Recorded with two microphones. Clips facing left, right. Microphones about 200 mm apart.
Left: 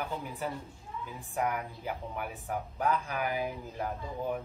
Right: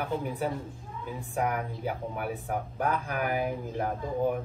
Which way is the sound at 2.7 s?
50° right (ahead or behind).